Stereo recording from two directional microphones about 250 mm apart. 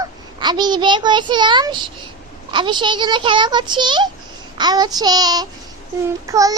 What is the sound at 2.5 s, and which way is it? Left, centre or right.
A child's voice, centre.